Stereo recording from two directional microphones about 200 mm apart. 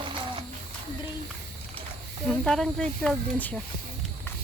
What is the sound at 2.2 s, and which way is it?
Speech, 5° left (ahead or behind).